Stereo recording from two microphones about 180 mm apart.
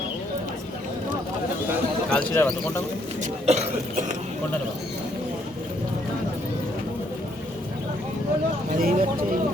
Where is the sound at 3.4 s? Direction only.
35° right (ahead or behind).